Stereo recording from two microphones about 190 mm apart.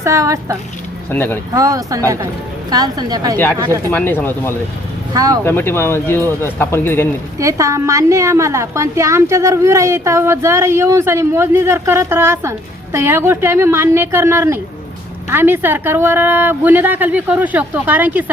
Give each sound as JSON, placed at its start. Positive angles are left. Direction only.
{"t": 0.0, "sound": "speech", "side_deg": -15}
{"t": 1.1, "sound": "speech", "side_deg": 10}
{"t": 1.5, "sound": "a woman's voice", "side_deg": -20}
{"t": 3.3, "sound": "speech", "side_deg": 10}
{"t": 5.1, "sound": "a woman's voice", "side_deg": -20}
{"t": 5.5, "sound": "speech", "side_deg": 10}
{"t": 7.3, "sound": "speech", "side_deg": -15}